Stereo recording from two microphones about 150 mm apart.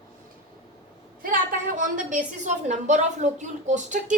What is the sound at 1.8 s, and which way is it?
A woman's voice, 60° right (ahead or behind).